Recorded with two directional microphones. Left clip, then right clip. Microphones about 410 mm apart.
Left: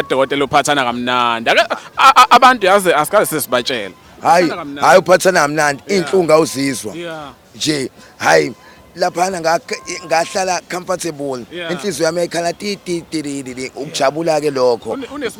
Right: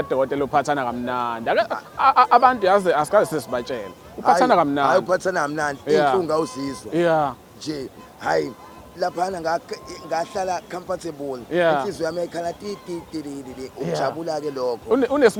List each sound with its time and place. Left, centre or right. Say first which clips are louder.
0.0 s a man's voice: left 6 dB; centre
4.5 s speech: right 8 dB; right
4.8 s a man's voice: left 9 dB; left
6.9 s speech: right 8 dB; right
7.6 s a man's voice: left 12 dB; left
14.9 s speech: right 7 dB; right